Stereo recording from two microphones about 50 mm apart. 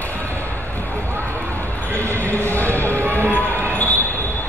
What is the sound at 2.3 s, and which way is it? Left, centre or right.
Basketball bounce, left.